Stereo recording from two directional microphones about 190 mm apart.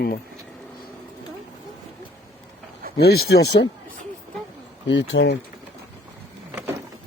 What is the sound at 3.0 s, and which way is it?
Speech, 55° left (ahead or behind).